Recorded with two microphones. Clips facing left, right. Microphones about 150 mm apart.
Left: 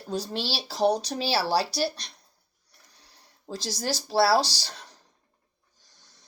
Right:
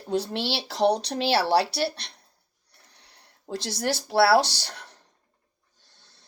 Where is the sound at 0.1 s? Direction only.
65° right (ahead or behind).